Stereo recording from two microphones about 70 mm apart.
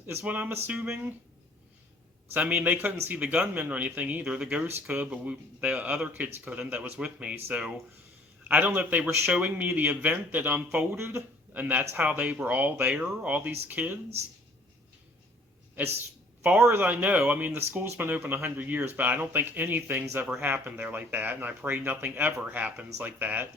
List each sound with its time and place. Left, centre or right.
0.2 s speech: right
2.3 s speech: right
10.9 s speech: right
11.5 s speech: right
15.7 s speech: right
16.8 s speech: right
17.5 s speech: right